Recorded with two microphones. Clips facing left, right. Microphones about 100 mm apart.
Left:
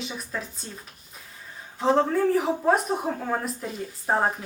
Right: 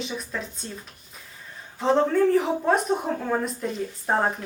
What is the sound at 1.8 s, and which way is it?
A woman's voice, centre (ahead or behind).